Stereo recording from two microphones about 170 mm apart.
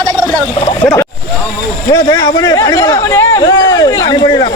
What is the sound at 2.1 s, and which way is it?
Speech, 25° left (ahead or behind).